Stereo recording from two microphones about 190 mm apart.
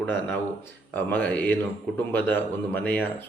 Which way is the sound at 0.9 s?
10° left (ahead or behind).